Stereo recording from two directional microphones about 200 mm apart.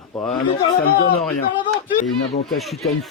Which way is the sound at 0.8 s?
50° left (ahead or behind).